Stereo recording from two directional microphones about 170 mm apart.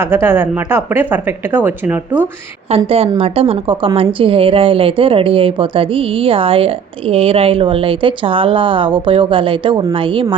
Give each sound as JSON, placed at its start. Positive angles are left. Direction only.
{"t": 0.0, "sound": "speech", "side_deg": -15}
{"t": 2.6, "sound": "a woman's voice", "side_deg": -35}